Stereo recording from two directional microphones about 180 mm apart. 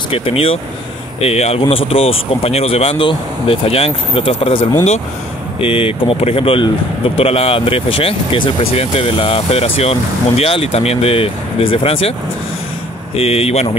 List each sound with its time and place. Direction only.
0.1 s speech: 30° left (ahead or behind)
13.1 s speech: 35° left (ahead or behind)